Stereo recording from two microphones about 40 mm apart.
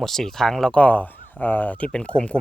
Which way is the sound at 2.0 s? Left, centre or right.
Left.